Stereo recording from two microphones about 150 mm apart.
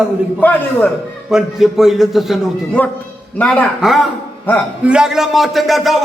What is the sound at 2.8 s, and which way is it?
Speech, 10° left (ahead or behind).